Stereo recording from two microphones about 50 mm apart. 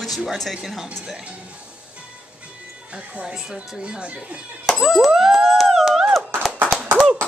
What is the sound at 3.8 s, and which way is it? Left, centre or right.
Speech, right.